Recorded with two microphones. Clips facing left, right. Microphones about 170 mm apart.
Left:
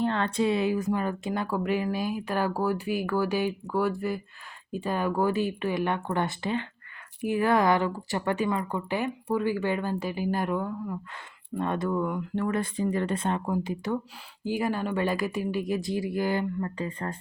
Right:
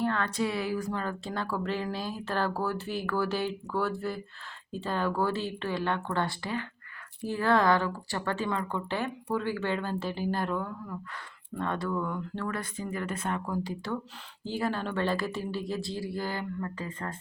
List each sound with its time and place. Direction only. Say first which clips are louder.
0.0 s speech: left 3 dB; 25° left (ahead or behind)